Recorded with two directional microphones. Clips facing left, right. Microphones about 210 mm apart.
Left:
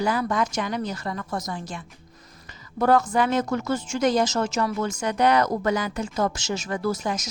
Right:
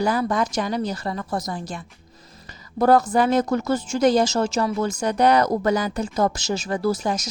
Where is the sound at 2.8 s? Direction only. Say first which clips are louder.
Right 3 dB; 35° right (ahead or behind).